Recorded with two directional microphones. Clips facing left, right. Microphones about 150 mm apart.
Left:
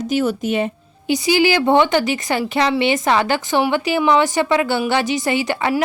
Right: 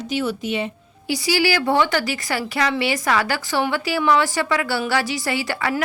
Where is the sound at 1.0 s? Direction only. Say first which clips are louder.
Left 5 dB; 20° left (ahead or behind).